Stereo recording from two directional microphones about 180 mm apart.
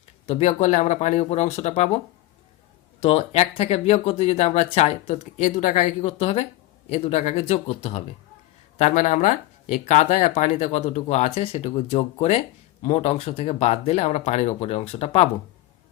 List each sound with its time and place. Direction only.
0.3 s speech: 40° left (ahead or behind)
3.0 s speech: 35° left (ahead or behind)